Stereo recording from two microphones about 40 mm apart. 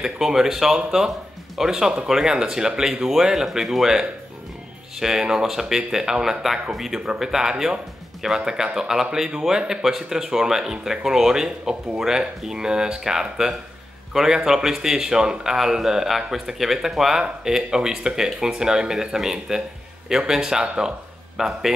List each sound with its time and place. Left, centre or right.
0.0 s a man's voice: centre